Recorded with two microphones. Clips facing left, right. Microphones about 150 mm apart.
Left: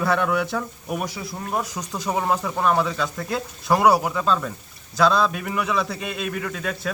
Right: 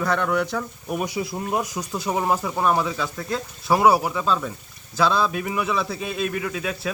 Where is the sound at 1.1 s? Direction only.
20° right (ahead or behind).